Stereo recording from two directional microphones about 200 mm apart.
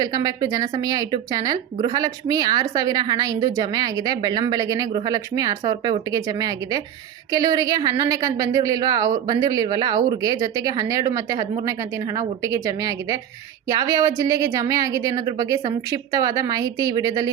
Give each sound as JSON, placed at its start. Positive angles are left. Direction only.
{"t": 0.0, "sound": "a woman's voice", "side_deg": -20}